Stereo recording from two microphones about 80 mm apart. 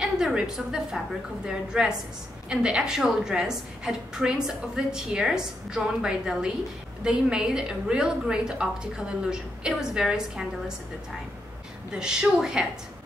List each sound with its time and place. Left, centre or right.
0.0 s a woman's voice: centre
11.9 s a woman's voice: centre